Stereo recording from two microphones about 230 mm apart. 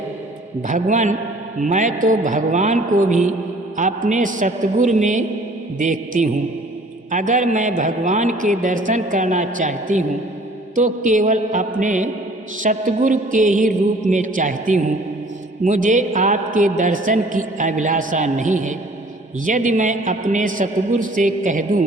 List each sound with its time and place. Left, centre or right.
0.7 s a man's voice: right